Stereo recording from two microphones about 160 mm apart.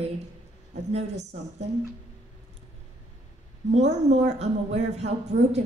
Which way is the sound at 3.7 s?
45° right (ahead or behind).